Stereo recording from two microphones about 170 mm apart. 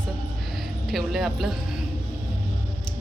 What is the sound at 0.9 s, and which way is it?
Speech, centre (ahead or behind).